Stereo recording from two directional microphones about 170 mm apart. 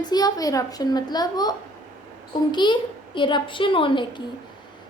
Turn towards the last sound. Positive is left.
turn(degrees=30)  # may be behind; listen again after turning